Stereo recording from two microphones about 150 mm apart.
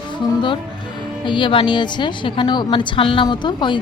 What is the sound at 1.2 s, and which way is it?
A man's voice, 30° left (ahead or behind).